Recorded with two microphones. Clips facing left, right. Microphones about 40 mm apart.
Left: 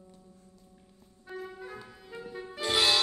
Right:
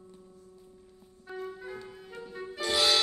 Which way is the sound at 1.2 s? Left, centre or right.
Centre.